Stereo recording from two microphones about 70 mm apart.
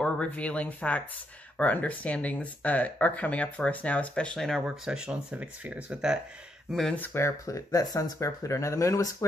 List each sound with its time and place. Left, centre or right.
0.0 s speech: centre
4.6 s speech: centre
5.3 s speech: right
6.7 s speech: centre
7.2 s speech: left